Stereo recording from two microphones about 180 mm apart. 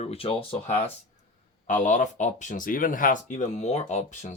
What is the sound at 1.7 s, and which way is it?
Speech, 45° left (ahead or behind).